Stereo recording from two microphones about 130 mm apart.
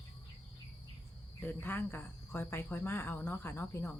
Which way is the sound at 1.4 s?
15° left (ahead or behind).